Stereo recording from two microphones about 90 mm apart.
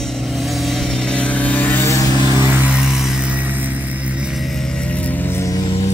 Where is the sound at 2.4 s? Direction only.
15° right (ahead or behind).